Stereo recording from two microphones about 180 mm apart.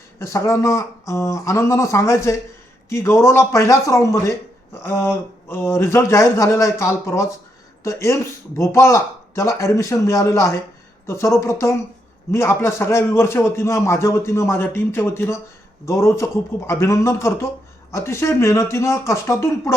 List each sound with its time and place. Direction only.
0.2 s a man's voice: 15° left (ahead or behind)